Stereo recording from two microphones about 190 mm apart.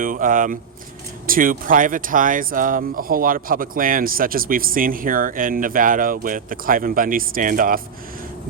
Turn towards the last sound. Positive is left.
turn(degrees=-45)  # may be behind; listen again after turning